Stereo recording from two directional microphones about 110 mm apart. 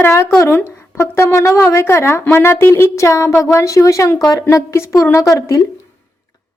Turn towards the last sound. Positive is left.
turn(degrees=30)  # may be behind; listen again after turning